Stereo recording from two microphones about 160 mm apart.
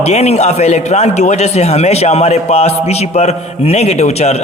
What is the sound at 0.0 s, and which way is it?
A man's voice, 45° left (ahead or behind).